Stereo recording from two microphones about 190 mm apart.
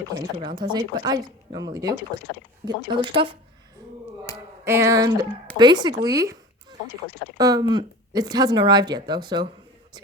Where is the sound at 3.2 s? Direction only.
30° right (ahead or behind).